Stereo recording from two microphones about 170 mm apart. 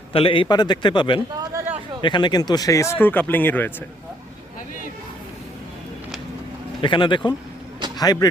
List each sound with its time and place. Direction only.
0.1 s a man's voice: 30° left (ahead or behind)
1.4 s a sound: 15° right (ahead or behind)
2.0 s speech: 25° left (ahead or behind); by 3.7 s 10° left (ahead or behind)
6.8 s a man's voice: 30° left (ahead or behind)